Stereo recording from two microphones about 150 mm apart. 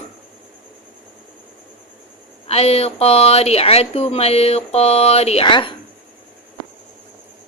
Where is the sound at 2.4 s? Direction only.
40° left (ahead or behind).